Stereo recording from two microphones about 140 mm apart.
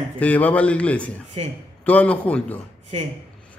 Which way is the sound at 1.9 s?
10° left (ahead or behind).